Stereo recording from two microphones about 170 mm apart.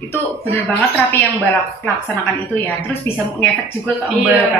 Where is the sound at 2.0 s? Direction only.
10° left (ahead or behind).